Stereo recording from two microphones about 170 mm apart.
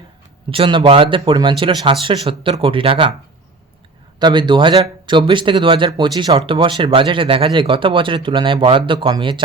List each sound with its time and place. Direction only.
0.5 s speech: 30° right (ahead or behind)
4.2 s speech: 25° right (ahead or behind)